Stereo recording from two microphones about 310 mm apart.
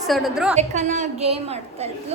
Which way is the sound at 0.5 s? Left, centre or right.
Right.